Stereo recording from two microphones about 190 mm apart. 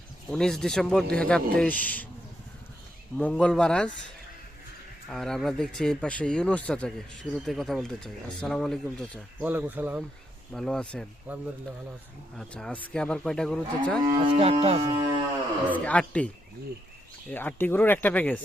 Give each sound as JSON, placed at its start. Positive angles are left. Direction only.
{"t": 0.3, "sound": "speech", "side_deg": 5}
{"t": 3.2, "sound": "speech", "side_deg": 5}
{"t": 5.0, "sound": "speech", "side_deg": 0}
{"t": 9.5, "sound": "speech", "side_deg": -10}
{"t": 10.5, "sound": "speech", "side_deg": 5}
{"t": 11.3, "sound": "speech", "side_deg": -10}
{"t": 12.4, "sound": "speech", "side_deg": 5}
{"t": 14.0, "sound": "cattle", "side_deg": -25}
{"t": 15.7, "sound": "speech", "side_deg": 5}
{"t": 17.3, "sound": "speech", "side_deg": 10}